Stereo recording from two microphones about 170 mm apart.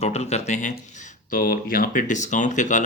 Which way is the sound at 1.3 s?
55° left (ahead or behind).